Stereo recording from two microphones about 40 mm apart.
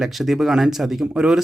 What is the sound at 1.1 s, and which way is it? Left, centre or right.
Speech, right.